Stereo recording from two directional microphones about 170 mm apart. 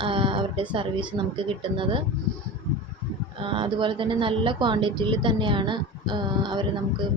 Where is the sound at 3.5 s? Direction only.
30° right (ahead or behind).